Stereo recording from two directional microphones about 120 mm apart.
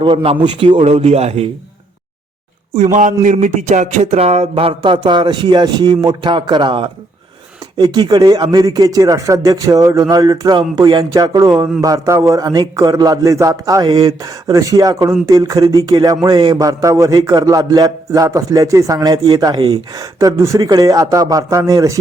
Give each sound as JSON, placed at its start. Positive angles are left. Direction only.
{"t": 0.0, "sound": "a man's voice", "side_deg": -45}
{"t": 2.7, "sound": "a sound", "side_deg": -80}
{"t": 4.8, "sound": "a man's voice", "side_deg": -40}